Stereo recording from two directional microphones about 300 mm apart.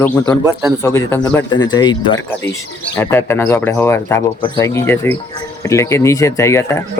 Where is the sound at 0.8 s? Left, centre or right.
Centre.